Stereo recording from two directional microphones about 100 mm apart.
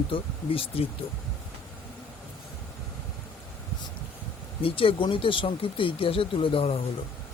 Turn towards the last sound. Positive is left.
turn(degrees=70)  # may be behind; listen again after turning